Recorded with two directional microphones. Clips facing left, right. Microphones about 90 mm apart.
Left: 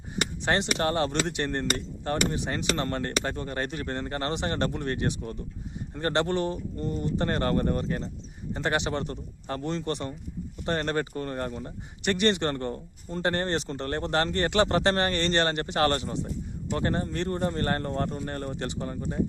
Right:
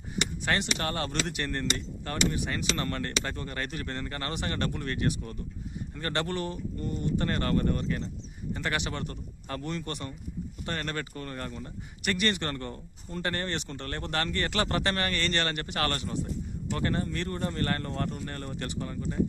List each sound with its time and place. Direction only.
0.4 s speech: 25° left (ahead or behind)